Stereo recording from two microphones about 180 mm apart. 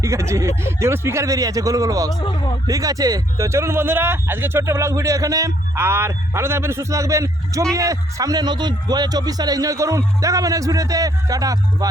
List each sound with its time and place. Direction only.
0.0 s speech: 15° right (ahead or behind)
2.1 s speech: 25° left (ahead or behind)
2.6 s a man's voice: 20° right (ahead or behind)